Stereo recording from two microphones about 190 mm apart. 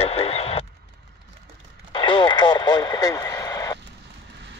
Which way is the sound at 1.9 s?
25° left (ahead or behind).